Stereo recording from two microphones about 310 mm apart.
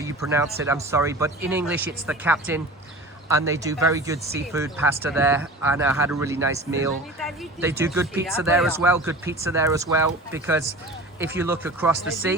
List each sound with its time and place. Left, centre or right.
0.0 s speech: centre